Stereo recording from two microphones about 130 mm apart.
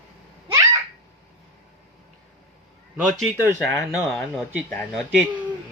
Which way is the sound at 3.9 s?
Centre (ahead or behind).